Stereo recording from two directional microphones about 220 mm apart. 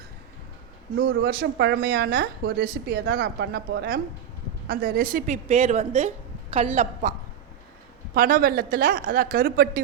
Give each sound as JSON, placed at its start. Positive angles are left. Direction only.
{"t": 0.9, "sound": "a woman's voice", "side_deg": -45}
{"t": 8.1, "sound": "a woman's voice", "side_deg": -40}